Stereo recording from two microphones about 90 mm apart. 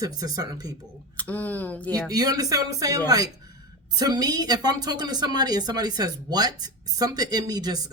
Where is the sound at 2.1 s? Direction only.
45° right (ahead or behind).